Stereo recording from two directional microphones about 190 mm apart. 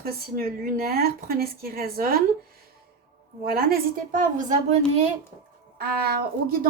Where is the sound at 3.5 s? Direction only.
50° right (ahead or behind).